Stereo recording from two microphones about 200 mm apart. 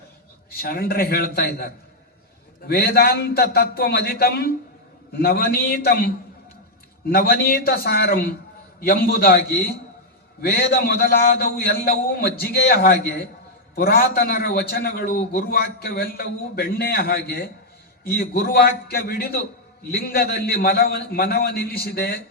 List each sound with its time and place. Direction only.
0.5 s a man's voice: 50° left (ahead or behind)
7.1 s a man's voice: 50° left (ahead or behind)